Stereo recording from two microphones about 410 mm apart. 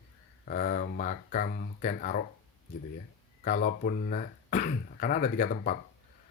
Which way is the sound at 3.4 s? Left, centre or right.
Centre.